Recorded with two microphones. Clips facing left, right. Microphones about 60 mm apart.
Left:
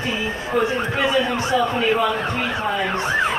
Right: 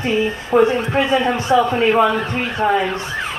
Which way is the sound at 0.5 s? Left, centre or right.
Right.